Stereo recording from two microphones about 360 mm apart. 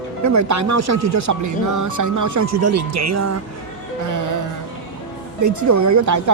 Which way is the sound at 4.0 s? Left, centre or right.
Right.